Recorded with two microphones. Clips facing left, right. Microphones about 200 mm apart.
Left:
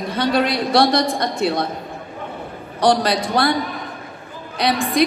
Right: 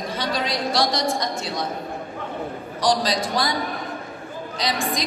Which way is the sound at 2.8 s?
60° left (ahead or behind).